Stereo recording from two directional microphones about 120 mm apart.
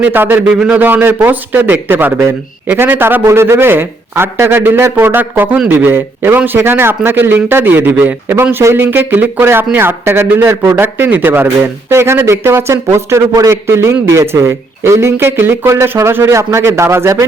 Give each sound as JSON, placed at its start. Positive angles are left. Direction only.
{"t": 0.0, "sound": "a man's voice", "side_deg": -15}